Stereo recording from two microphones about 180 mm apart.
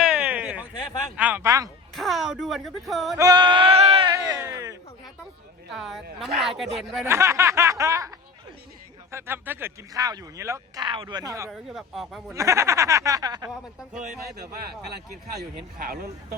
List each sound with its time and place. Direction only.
0.1 s a sound: 10° right (ahead or behind)
1.1 s speech: 10° right (ahead or behind)
2.0 s a woman's voice: centre (ahead or behind)
3.2 s sheep: 20° right (ahead or behind)
5.7 s a woman's voice: centre (ahead or behind)
7.0 s speech: 15° right (ahead or behind)
9.1 s speech: 10° right (ahead or behind)
11.7 s a woman's voice: centre (ahead or behind)
12.3 s speech: 15° right (ahead or behind)
13.5 s a woman's voice: centre (ahead or behind)
15.4 s speech: 55° right (ahead or behind)